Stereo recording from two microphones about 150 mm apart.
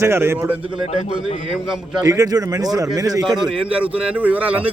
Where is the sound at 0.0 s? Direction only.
15° right (ahead or behind).